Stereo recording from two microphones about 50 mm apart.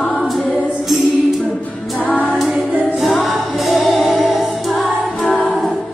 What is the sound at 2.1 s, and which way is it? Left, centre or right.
Music, left.